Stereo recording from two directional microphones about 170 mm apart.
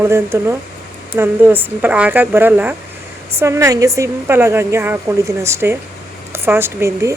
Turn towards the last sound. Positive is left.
turn(degrees=-15)  # may be behind; listen again after turning